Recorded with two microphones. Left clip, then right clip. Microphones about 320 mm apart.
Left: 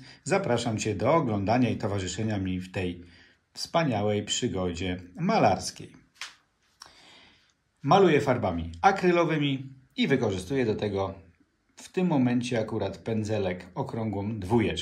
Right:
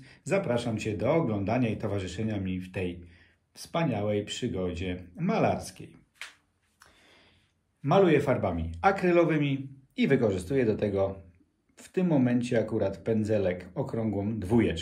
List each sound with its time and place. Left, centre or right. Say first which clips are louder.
0.0 s speech: left 2 dB; centre
7.8 s a man's voice: left 2 dB; centre